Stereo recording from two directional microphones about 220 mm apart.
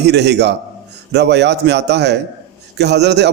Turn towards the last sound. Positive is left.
turn(degrees=-50)  # may be behind; listen again after turning